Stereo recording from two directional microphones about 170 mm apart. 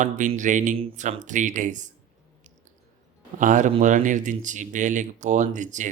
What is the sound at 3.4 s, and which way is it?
Speech, 50° right (ahead or behind).